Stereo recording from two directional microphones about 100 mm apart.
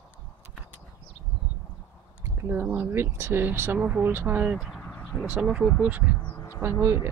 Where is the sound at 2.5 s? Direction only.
20° right (ahead or behind).